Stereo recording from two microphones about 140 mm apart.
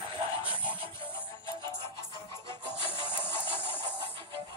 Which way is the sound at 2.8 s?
40° left (ahead or behind).